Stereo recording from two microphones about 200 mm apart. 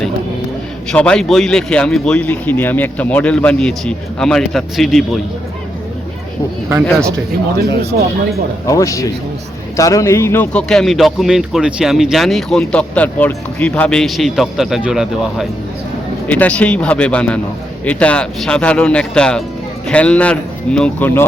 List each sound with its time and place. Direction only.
0.9 s a man's voice: 5° left (ahead or behind)
6.8 s a man's voice: 5° left (ahead or behind)
8.6 s a man's voice: 15° left (ahead or behind)